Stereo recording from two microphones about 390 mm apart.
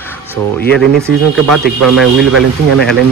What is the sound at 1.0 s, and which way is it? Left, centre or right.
Speech, centre.